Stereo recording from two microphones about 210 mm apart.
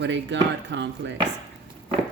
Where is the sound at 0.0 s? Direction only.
60° right (ahead or behind).